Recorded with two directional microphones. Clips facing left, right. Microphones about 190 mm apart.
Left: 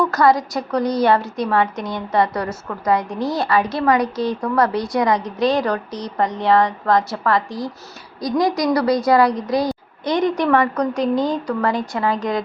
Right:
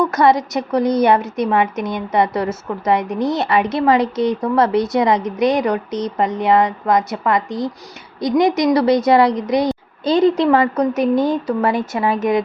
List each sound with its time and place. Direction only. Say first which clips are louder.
0.0 s a woman's voice: right 2 dB; 20° right (ahead or behind)